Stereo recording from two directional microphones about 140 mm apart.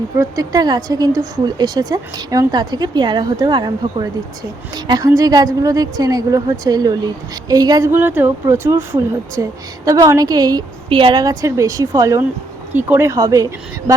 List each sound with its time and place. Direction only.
0.2 s speech: 25° right (ahead or behind)
10.8 s speech: 35° right (ahead or behind)